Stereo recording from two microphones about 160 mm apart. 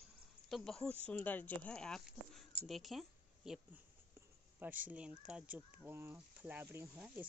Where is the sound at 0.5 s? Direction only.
Centre (ahead or behind).